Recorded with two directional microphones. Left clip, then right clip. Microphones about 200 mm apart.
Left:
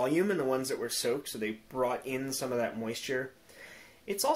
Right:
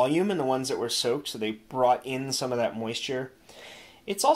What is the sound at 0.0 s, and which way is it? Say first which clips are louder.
Speech: right 4 dB; 35° right (ahead or behind).